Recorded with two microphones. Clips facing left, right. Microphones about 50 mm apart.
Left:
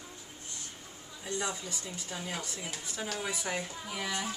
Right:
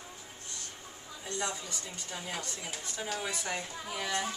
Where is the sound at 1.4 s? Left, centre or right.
Centre.